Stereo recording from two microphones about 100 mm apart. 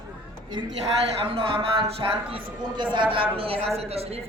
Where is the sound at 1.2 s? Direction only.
70° right (ahead or behind).